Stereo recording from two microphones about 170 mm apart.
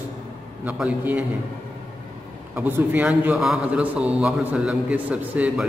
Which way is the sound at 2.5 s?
10° right (ahead or behind).